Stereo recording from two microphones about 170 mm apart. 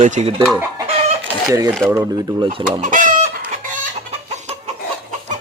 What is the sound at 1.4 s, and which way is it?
Speech, 20° right (ahead or behind).